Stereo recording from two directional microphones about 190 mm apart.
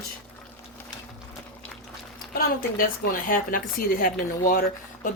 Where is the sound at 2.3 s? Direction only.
50° left (ahead or behind).